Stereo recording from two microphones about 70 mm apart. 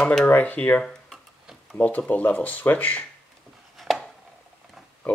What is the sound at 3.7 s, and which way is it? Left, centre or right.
Chopping, centre.